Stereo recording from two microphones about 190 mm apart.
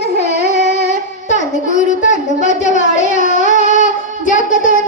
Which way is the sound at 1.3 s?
40° left (ahead or behind).